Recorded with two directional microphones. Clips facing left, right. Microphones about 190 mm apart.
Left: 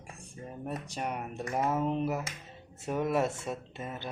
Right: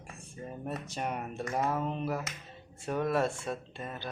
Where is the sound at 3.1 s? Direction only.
20° left (ahead or behind).